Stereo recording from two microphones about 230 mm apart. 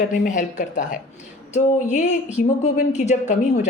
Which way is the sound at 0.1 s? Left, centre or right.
Left.